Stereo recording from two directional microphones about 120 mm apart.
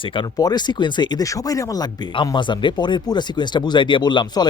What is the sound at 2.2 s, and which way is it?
Speech, 40° left (ahead or behind).